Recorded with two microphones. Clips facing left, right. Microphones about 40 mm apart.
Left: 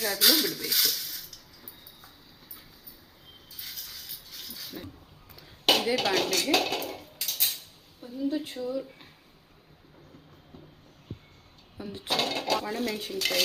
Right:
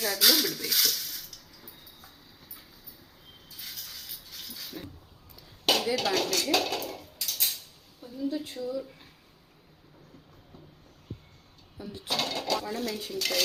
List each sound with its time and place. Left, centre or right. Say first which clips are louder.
0.0 s a sound: even; centre
3.5 s dog: even; centre
5.6 s dishes: left 2 dB; left
8.0 s a sound: left 2 dB; left
8.5 s speech: left 1 dB; left
11.8 s speech: left 2 dB; left